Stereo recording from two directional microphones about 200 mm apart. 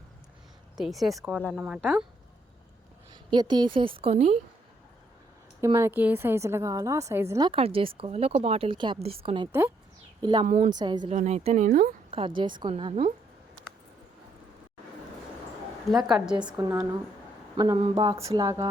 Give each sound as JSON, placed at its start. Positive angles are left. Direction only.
{"t": 0.8, "sound": "speech", "side_deg": 0}
{"t": 3.2, "sound": "a woman's voice", "side_deg": -20}
{"t": 5.5, "sound": "a woman's voice", "side_deg": -15}
{"t": 9.5, "sound": "a woman's voice", "side_deg": -10}
{"t": 10.2, "sound": "speech", "side_deg": -25}
{"t": 10.4, "sound": "speech", "side_deg": -40}
{"t": 10.8, "sound": "a woman's voice", "side_deg": -20}
{"t": 11.1, "sound": "speech", "side_deg": -35}
{"t": 12.1, "sound": "a woman's voice", "side_deg": -25}
{"t": 15.9, "sound": "a woman's voice", "side_deg": 0}